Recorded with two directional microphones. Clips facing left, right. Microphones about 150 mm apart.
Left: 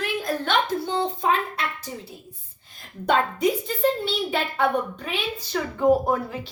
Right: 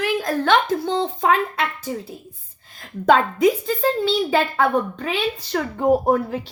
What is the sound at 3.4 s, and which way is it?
A woman's voice, 90° right.